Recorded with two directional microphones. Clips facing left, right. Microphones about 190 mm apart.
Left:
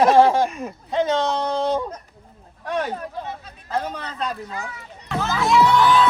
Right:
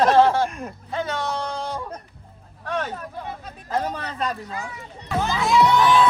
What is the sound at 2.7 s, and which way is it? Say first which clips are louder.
Speech: left 2 dB; 15° left (ahead or behind).